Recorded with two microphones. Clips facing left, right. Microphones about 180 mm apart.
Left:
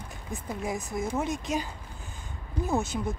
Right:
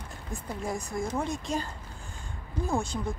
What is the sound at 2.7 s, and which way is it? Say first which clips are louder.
Speech: left 2 dB; 5° left (ahead or behind).